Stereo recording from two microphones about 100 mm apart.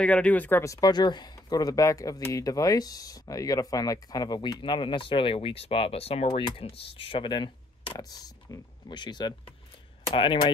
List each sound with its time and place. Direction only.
0.0 s speech: 10° left (ahead or behind)
0.7 s speech: 40° left (ahead or behind); by 6.4 s 90° left
6.5 s speech: 60° left (ahead or behind)